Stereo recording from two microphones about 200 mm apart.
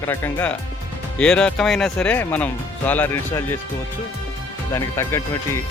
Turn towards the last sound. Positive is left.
turn(degrees=15)  # may be behind; listen again after turning